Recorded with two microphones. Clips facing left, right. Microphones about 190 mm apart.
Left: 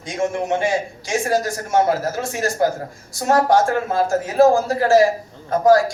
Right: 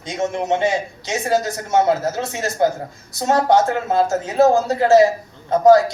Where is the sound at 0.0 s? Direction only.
20° right (ahead or behind).